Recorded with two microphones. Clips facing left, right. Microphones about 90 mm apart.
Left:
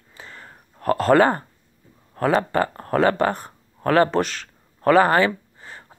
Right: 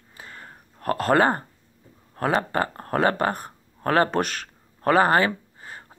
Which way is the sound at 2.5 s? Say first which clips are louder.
Left 4 dB; 35° right (ahead or behind).